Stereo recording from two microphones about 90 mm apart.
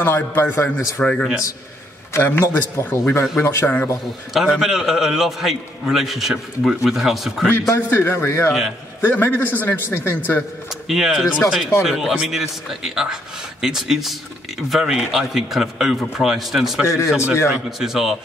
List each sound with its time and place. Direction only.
0.0 s a man's voice: 25° left (ahead or behind)
0.9 s speech: 10° left (ahead or behind)
2.2 s a man's voice: 25° left (ahead or behind)
4.3 s a man's voice: 5° right (ahead or behind)
7.6 s a man's voice: 30° left (ahead or behind)
10.7 s a man's voice: 5° right (ahead or behind)
16.8 s speech: 30° left (ahead or behind)
17.5 s a man's voice: 5° right (ahead or behind)